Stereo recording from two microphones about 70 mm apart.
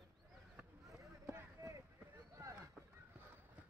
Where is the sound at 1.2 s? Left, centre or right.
Right.